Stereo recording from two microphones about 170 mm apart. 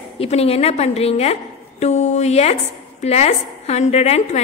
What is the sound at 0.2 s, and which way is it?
A woman's voice, 35° left (ahead or behind).